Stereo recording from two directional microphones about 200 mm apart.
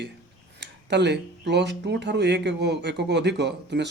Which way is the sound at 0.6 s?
60° right (ahead or behind).